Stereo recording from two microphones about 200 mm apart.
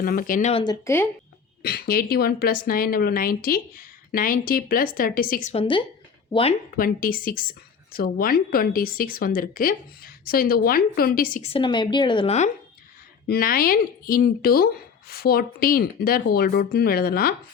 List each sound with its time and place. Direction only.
0.0 s speech: 45° left (ahead or behind)
0.5 s speech: 20° left (ahead or behind)
1.6 s speech: 50° left (ahead or behind); by 5.8 s 25° left (ahead or behind)
6.7 s speech: 45° left (ahead or behind)
11.5 s speech: 25° left (ahead or behind)
13.2 s speech: 50° left (ahead or behind)